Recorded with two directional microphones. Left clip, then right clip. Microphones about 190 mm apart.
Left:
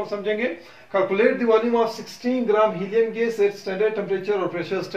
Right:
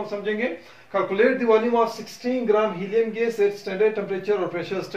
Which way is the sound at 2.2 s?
5° left (ahead or behind).